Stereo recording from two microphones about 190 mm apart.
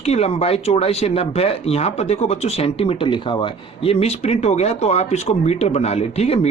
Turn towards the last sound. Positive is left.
turn(degrees=35)  # may be behind; listen again after turning